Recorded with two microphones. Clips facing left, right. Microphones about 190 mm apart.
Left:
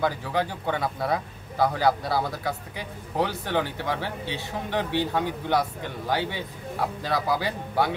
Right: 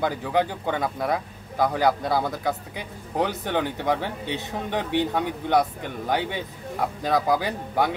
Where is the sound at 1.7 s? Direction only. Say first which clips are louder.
Right 2 dB; 15° right (ahead or behind).